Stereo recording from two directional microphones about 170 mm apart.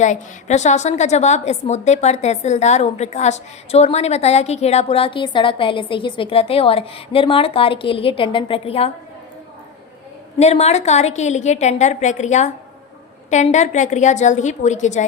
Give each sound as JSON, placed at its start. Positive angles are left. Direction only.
{"t": 0.0, "sound": "a woman's voice", "side_deg": 45}
{"t": 10.3, "sound": "a woman's voice", "side_deg": 40}